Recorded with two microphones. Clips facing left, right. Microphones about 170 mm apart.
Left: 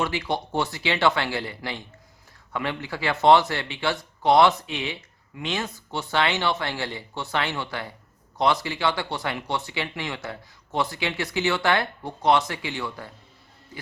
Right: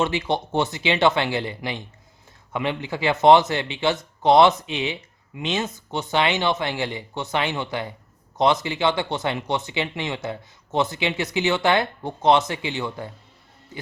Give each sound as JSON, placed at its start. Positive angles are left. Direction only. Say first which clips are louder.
{"t": 0.0, "sound": "speech", "louder": "right 3 dB", "side_deg": -20}